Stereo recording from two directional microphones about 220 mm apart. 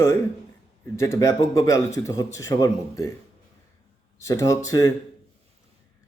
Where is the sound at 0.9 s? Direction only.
15° left (ahead or behind).